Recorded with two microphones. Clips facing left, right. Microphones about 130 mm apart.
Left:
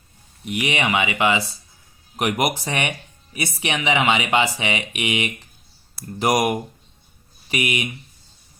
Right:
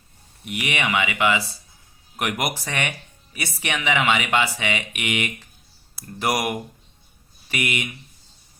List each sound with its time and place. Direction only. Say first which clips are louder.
0.4 s speech: left 3 dB; 25° left (ahead or behind)